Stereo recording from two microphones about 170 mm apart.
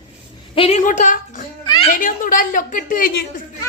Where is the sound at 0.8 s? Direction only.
50° left (ahead or behind).